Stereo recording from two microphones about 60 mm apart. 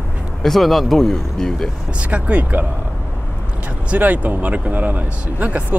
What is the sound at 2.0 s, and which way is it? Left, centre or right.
Speech, right.